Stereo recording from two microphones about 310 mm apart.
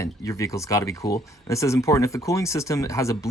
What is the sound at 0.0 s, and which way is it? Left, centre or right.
Speech, centre.